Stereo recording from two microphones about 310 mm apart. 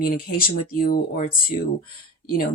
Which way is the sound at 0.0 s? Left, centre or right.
Left.